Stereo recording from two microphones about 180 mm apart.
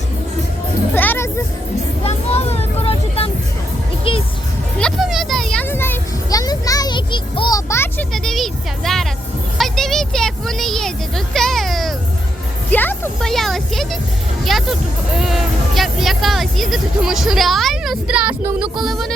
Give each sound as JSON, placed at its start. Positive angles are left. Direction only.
{"t": 0.9, "sound": "music", "side_deg": 10}
{"t": 2.0, "sound": "a sound", "side_deg": 35}
{"t": 4.8, "sound": "music", "side_deg": 0}
{"t": 8.1, "sound": "speech", "side_deg": 0}
{"t": 9.6, "sound": "a sound", "side_deg": 0}
{"t": 11.3, "sound": "music", "side_deg": 0}
{"t": 12.7, "sound": "speech", "side_deg": 10}